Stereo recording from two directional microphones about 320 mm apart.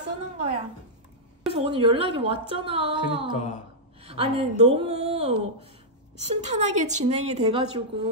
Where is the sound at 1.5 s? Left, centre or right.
Centre.